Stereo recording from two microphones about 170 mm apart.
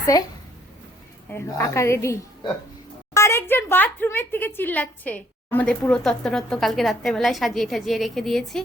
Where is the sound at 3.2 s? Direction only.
15° left (ahead or behind).